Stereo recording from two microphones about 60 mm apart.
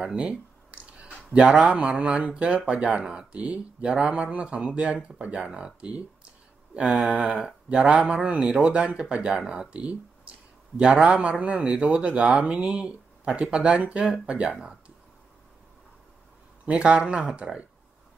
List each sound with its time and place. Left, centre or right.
0.0 s a sound: centre
2.0 s speech: centre
6.7 s a sound: centre
7.1 s speech: right
7.3 s speech: centre
7.9 s speech: centre
16.6 s speech: centre